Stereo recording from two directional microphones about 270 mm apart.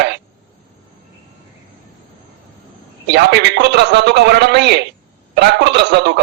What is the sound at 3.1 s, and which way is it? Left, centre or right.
A man's voice, right.